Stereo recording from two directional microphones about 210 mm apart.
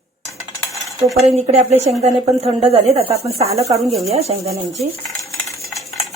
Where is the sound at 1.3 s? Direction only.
30° right (ahead or behind).